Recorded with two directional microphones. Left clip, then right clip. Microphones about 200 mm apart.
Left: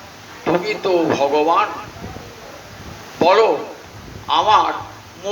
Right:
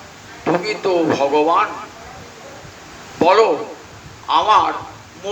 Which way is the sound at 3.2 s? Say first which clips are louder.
Even; 20° right (ahead or behind).